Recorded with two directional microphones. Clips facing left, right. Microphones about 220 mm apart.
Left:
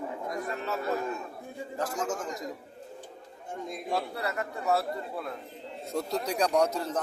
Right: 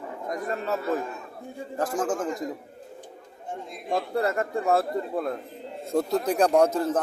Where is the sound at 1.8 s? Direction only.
55° right (ahead or behind).